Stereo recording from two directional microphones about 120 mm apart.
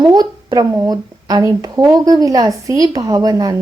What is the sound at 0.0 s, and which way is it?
A woman's voice, 35° right (ahead or behind).